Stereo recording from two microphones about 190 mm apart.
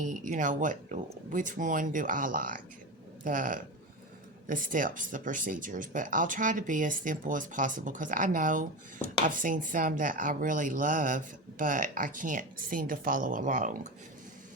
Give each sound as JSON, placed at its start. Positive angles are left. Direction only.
{"t": 0.0, "sound": "speech", "side_deg": -45}